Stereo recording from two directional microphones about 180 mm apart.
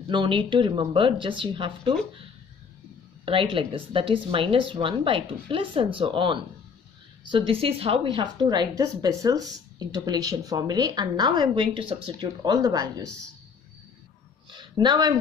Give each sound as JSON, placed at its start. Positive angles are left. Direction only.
{"t": 0.1, "sound": "a woman's voice", "side_deg": -25}
{"t": 3.3, "sound": "a woman's voice", "side_deg": -30}
{"t": 14.5, "sound": "speech", "side_deg": -25}